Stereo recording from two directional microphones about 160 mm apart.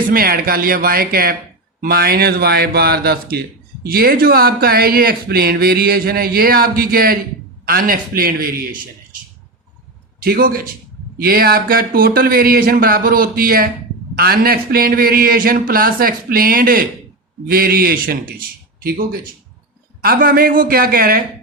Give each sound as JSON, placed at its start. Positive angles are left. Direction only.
{"t": 0.1, "sound": "speech", "side_deg": -70}
{"t": 10.2, "sound": "speech", "side_deg": -70}